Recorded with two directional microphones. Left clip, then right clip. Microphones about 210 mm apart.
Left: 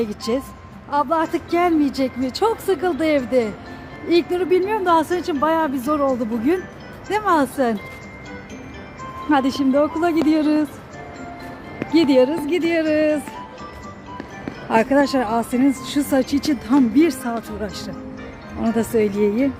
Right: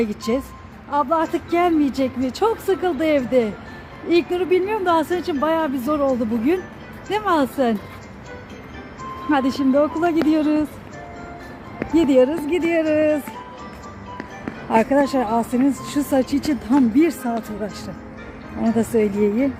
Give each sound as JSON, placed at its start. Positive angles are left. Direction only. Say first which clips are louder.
{"t": 0.0, "sound": "speech", "louder": "even", "side_deg": -15}
{"t": 7.1, "sound": "speech", "louder": "left 1 dB", "side_deg": -15}
{"t": 9.3, "sound": "speech", "louder": "left 1 dB", "side_deg": -10}
{"t": 11.8, "sound": "speech", "louder": "even", "side_deg": 0}
{"t": 14.7, "sound": "speech", "louder": "left 1 dB", "side_deg": 0}